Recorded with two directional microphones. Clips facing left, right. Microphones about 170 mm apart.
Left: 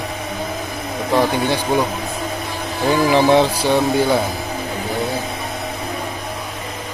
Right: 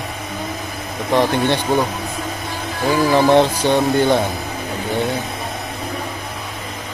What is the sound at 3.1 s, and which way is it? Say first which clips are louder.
Speech: even; 15° left (ahead or behind).